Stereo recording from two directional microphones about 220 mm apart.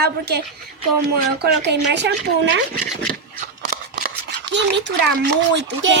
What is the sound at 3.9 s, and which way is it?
A child's voice, 50° right (ahead or behind).